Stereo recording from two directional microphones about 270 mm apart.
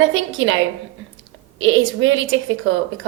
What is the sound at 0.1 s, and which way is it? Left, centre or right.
Speech, right.